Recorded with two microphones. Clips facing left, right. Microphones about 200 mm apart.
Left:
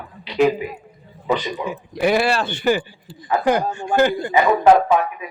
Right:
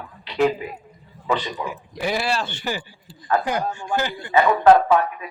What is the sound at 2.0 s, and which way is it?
Speech, 60° left (ahead or behind).